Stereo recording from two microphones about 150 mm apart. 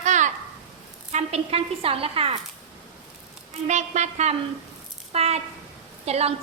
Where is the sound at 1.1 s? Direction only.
45° right (ahead or behind).